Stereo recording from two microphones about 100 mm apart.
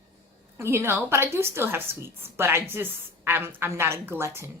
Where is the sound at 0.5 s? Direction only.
25° right (ahead or behind).